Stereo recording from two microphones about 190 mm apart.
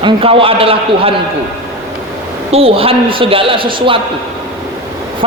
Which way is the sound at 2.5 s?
30° right (ahead or behind).